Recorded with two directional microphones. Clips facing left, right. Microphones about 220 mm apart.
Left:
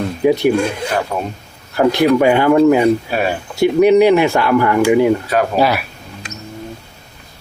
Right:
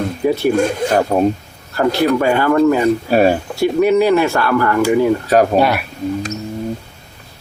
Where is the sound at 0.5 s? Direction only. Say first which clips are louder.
Right 3 dB; 45° right (ahead or behind).